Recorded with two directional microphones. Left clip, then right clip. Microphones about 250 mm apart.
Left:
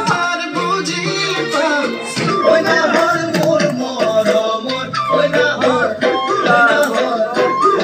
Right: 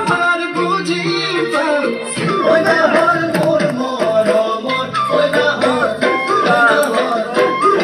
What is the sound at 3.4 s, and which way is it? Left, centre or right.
Music, centre.